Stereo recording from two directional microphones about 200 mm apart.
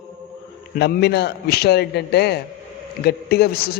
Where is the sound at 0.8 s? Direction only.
55° left (ahead or behind).